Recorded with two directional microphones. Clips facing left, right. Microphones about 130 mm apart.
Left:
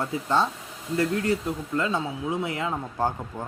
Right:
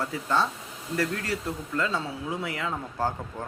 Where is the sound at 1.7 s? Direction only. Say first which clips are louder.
Left 2 dB; 20° left (ahead or behind).